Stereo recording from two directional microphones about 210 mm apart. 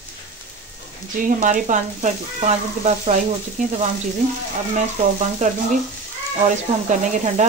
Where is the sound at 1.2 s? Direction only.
40° right (ahead or behind).